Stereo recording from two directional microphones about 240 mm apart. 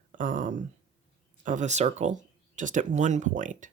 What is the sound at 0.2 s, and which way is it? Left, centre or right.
Speech, right.